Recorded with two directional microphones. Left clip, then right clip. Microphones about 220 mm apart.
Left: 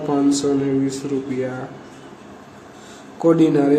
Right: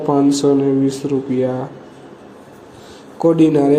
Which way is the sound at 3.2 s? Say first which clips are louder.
Right 3 dB; 15° right (ahead or behind).